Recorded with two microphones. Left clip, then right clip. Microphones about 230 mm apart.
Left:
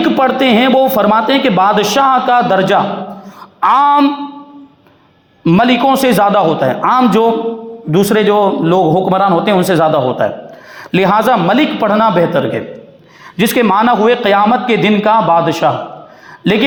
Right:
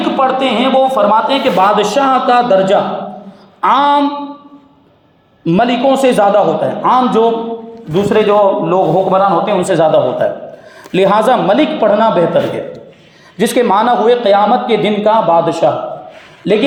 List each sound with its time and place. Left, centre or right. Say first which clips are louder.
0.0 s speech: left 1 dB; left
5.5 s speech: left 1 dB; left